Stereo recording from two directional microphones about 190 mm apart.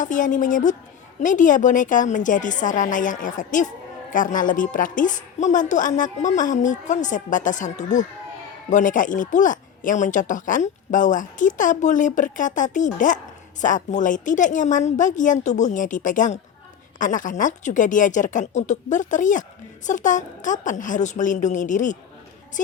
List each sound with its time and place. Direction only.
0.0 s a woman's voice: 45° left (ahead or behind)